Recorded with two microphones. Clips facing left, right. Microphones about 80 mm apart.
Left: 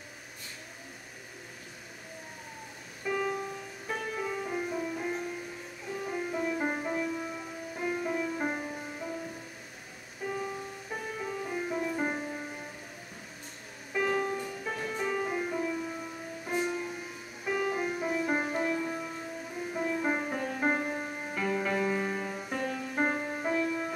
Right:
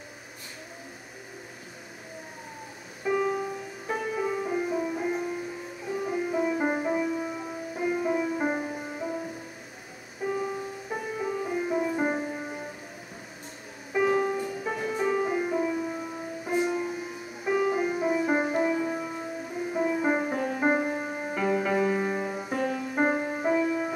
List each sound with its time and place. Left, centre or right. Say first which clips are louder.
3.0 s music: right 5 dB; centre
10.2 s music: right 5 dB; centre
13.9 s music: right 5 dB; centre